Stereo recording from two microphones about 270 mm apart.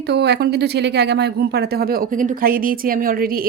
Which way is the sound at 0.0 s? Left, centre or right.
Right.